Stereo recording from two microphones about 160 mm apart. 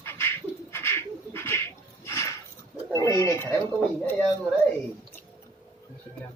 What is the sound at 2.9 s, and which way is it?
Speech, 20° left (ahead or behind).